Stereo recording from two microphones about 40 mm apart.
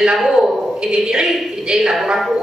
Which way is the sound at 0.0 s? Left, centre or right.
Centre.